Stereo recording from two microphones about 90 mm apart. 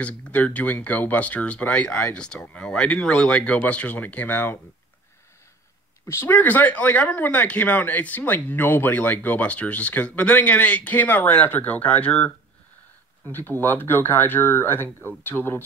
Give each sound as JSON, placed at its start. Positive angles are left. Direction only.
{"t": 0.0, "sound": "speech", "side_deg": 15}
{"t": 6.0, "sound": "speech", "side_deg": 25}
{"t": 13.3, "sound": "speech", "side_deg": 25}